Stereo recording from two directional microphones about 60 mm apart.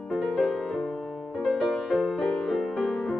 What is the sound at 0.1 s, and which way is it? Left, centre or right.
Music, centre.